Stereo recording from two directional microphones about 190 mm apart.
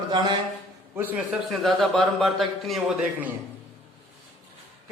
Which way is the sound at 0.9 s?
10° right (ahead or behind).